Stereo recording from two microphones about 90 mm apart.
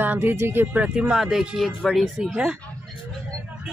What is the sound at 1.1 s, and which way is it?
Speech, 5° right (ahead or behind).